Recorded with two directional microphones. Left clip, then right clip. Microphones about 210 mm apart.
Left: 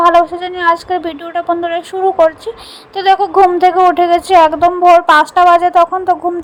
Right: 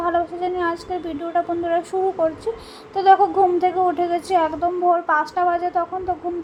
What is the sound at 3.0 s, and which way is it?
A woman's voice, 30° left (ahead or behind).